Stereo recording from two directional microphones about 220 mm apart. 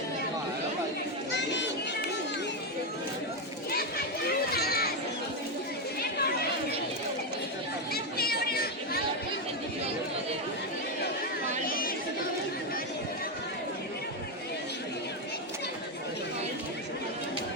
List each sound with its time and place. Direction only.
1.3 s a sound: 55° left (ahead or behind)
3.7 s a sound: 45° left (ahead or behind)
4.5 s children playing: 45° left (ahead or behind)
6.0 s chatter: 45° left (ahead or behind)
7.9 s chatter: 45° left (ahead or behind)
11.6 s chatter: 40° left (ahead or behind)